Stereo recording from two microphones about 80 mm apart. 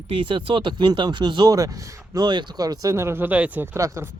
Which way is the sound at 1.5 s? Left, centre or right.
Right.